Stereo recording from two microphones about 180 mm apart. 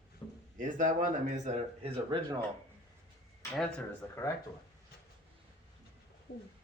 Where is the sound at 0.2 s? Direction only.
15° left (ahead or behind).